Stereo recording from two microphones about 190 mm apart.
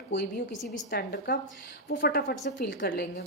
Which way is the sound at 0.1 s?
65° left (ahead or behind).